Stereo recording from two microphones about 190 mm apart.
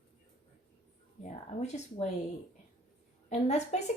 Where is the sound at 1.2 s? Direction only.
35° left (ahead or behind).